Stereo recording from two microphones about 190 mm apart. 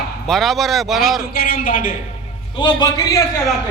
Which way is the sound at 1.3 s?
50° left (ahead or behind).